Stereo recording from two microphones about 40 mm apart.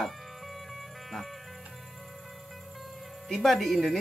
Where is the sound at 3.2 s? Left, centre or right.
Centre.